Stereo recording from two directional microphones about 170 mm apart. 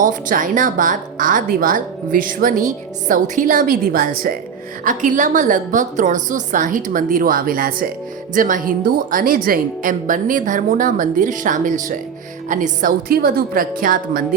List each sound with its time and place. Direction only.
0.0 s a woman's voice: 50° right (ahead or behind)